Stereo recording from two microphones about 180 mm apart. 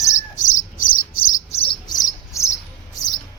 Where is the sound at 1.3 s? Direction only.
35° left (ahead or behind); by 2.5 s 15° left (ahead or behind).